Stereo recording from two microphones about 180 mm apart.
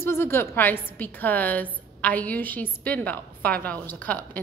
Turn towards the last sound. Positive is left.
turn(degrees=10)  # may be behind; listen again after turning